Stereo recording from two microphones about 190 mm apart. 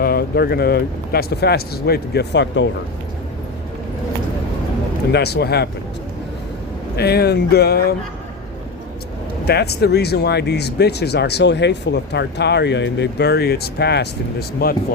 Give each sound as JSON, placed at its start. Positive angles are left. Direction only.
{"t": 0.0, "sound": "speech", "side_deg": 55}
{"t": 5.1, "sound": "speech", "side_deg": 60}
{"t": 6.9, "sound": "speech", "side_deg": 55}
{"t": 9.5, "sound": "speech", "side_deg": 60}